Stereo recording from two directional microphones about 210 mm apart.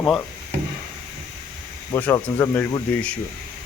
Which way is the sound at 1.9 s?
15° left (ahead or behind).